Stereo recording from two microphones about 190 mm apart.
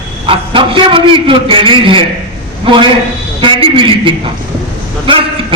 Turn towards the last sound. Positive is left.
turn(degrees=-25)  # may be behind; listen again after turning